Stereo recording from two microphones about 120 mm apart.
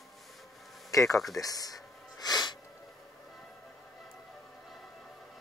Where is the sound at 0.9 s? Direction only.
30° left (ahead or behind).